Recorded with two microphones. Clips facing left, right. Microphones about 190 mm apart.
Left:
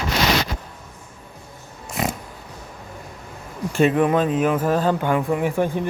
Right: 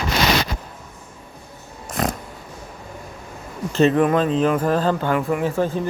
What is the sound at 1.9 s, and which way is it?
Pig, 5° left (ahead or behind).